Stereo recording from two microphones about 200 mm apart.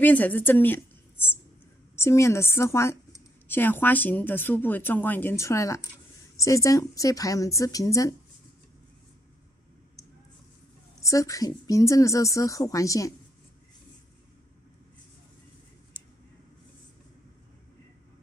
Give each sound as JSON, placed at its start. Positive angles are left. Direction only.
{"t": 0.0, "sound": "a woman's voice", "side_deg": 10}
{"t": 11.0, "sound": "speech", "side_deg": 15}